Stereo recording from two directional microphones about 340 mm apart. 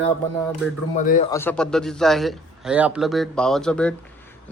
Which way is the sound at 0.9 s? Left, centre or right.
Left.